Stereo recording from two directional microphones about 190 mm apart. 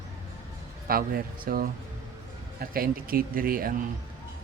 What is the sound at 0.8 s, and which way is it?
Speech, 50° right (ahead or behind).